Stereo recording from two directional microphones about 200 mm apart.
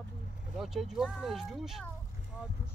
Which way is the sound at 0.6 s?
Centre (ahead or behind).